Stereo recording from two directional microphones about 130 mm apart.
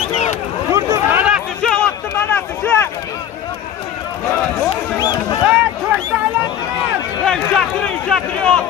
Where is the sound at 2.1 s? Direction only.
15° left (ahead or behind).